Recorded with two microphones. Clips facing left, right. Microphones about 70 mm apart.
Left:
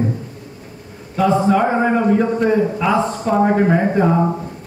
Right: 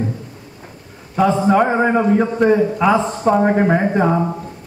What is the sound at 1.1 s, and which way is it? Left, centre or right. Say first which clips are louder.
A man's voice: right 1 dB; centre.